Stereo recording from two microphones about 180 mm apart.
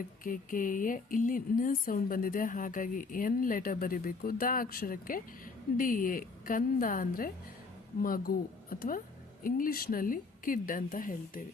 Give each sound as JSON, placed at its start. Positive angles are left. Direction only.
{"t": 0.0, "sound": "speech", "side_deg": 50}
{"t": 8.7, "sound": "speech", "side_deg": 50}